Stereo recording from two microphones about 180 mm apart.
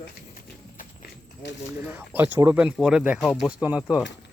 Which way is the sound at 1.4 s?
75° left (ahead or behind).